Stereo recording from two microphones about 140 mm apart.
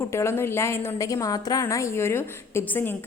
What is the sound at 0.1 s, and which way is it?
A woman's voice, 20° left (ahead or behind).